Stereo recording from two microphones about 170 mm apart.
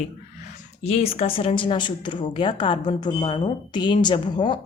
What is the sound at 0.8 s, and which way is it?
A woman's voice, 35° left (ahead or behind).